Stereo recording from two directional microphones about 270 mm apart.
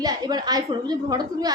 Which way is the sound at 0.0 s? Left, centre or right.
Centre.